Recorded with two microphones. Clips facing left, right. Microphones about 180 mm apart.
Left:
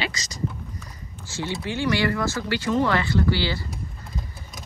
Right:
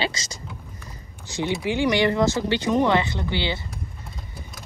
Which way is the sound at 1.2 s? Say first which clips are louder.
Right 4 dB; 15° right (ahead or behind).